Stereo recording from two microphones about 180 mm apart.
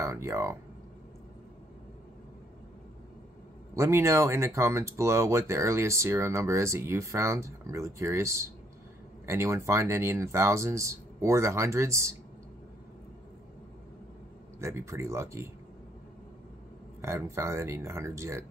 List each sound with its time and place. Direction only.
0.0 s speech: 15° right (ahead or behind)
3.7 s speech: 15° right (ahead or behind)
14.6 s speech: 15° right (ahead or behind)
17.0 s speech: 15° right (ahead or behind)